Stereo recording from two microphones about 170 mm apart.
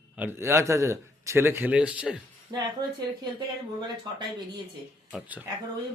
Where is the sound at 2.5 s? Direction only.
25° right (ahead or behind).